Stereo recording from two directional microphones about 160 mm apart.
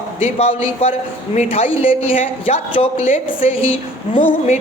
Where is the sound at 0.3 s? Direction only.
40° left (ahead or behind).